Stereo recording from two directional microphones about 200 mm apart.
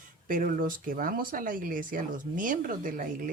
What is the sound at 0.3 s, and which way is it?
Speech, 40° right (ahead or behind).